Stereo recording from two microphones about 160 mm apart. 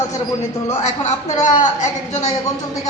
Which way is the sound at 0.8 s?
45° left (ahead or behind).